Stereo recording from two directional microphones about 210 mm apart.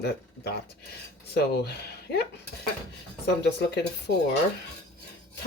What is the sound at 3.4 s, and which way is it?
Speech, 50° left (ahead or behind).